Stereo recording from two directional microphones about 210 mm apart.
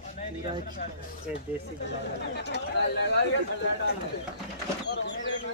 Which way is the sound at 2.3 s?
55° left (ahead or behind).